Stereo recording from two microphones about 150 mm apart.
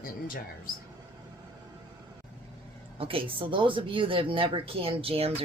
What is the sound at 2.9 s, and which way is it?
Speech, 35° right (ahead or behind).